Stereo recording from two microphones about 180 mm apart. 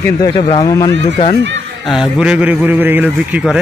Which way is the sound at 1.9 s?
5° right (ahead or behind).